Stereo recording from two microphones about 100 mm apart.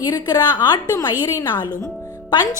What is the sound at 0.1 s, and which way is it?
A woman's voice, 40° left (ahead or behind).